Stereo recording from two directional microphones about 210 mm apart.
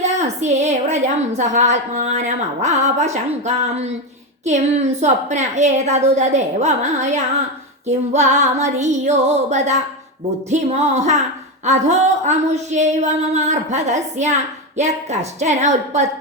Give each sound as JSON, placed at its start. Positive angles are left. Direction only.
{"t": 0.0, "sound": "a woman's voice", "side_deg": -35}